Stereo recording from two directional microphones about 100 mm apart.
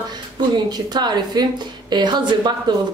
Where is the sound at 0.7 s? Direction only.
45° right (ahead or behind).